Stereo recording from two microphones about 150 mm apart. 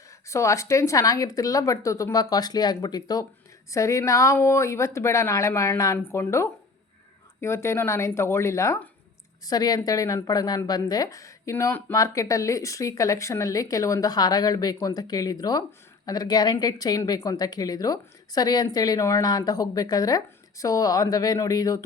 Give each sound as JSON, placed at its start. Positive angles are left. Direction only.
{"t": 0.3, "sound": "a woman's voice", "side_deg": 20}